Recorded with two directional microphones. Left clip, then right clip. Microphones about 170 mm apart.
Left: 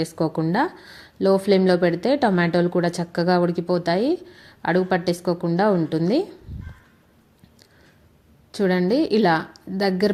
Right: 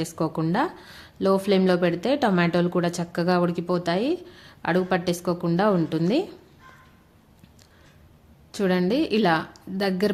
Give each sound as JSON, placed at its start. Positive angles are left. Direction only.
{"t": 0.0, "sound": "a woman's voice", "side_deg": 10}
{"t": 8.5, "sound": "a woman's voice", "side_deg": 10}